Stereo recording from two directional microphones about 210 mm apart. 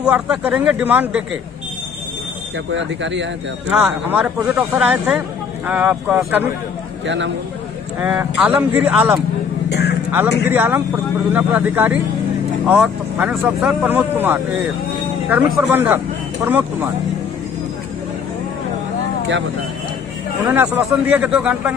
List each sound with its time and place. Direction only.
0.0 s speech: 5° right (ahead or behind)
2.7 s speech: 60° right (ahead or behind)
3.7 s speech: 5° right (ahead or behind)
7.1 s speech: 60° right (ahead or behind)
8.0 s speech: 10° right (ahead or behind)
9.7 s vehicle: 50° left (ahead or behind)
10.5 s speech: 10° right (ahead or behind)
20.4 s speech: 10° right (ahead or behind)